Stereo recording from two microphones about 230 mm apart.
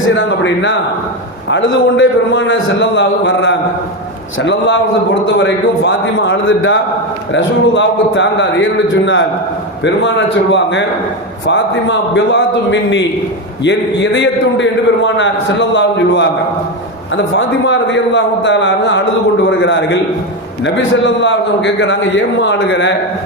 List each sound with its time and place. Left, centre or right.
0.1 s a man's voice: left
9.8 s a man's voice: left
17.3 s a man's voice: left